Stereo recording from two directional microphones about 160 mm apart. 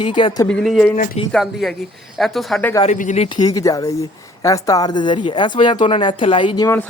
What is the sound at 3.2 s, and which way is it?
Speech, 25° left (ahead or behind).